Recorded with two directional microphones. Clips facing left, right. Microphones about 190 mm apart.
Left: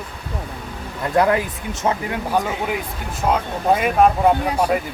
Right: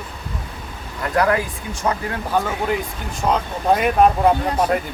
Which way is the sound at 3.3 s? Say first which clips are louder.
Even; centre (ahead or behind).